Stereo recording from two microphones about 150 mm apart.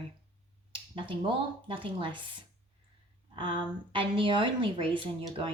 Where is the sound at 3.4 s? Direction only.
35° right (ahead or behind).